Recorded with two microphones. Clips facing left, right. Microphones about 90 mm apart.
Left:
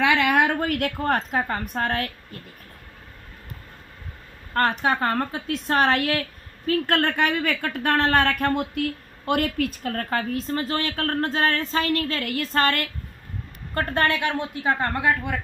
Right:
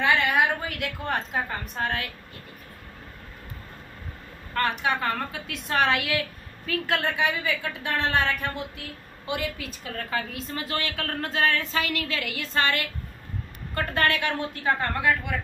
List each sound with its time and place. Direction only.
0.0 s a woman's voice: 80° left; by 2.0 s 50° left (ahead or behind)
4.6 s a woman's voice: 40° left (ahead or behind)
7.0 s a woman's voice: 55° left (ahead or behind)
14.0 s a woman's voice: 20° left (ahead or behind)